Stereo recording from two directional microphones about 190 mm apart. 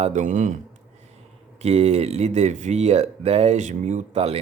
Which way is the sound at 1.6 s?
35° right (ahead or behind).